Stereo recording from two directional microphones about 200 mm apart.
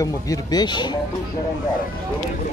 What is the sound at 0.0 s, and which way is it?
Speech, 20° left (ahead or behind).